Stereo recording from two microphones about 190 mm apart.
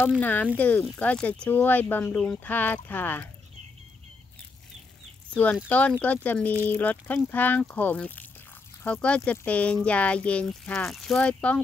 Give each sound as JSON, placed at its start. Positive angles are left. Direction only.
{"t": 0.2, "sound": "speech", "side_deg": 10}
{"t": 5.3, "sound": "speech", "side_deg": 5}